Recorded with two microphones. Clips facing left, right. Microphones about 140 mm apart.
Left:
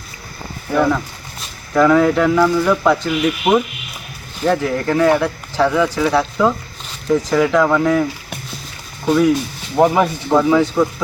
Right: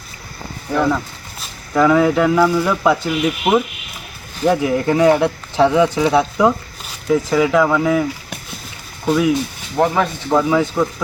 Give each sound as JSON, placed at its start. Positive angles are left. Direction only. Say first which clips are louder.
{"t": 0.7, "sound": "speech", "louder": "left 1 dB", "side_deg": 0}
{"t": 7.1, "sound": "speech", "louder": "even", "side_deg": -5}
{"t": 9.0, "sound": "speech", "louder": "left 2 dB", "side_deg": -5}
{"t": 9.7, "sound": "speech", "louder": "left 3 dB", "side_deg": 15}
{"t": 10.3, "sound": "speech", "louder": "left 2 dB", "side_deg": 0}